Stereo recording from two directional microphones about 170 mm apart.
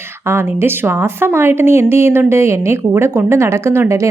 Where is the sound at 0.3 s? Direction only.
15° right (ahead or behind).